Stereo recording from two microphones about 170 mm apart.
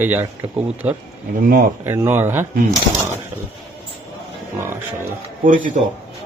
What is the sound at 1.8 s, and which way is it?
Speech, 15° right (ahead or behind).